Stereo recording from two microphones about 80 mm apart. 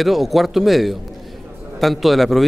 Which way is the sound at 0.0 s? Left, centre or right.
Centre.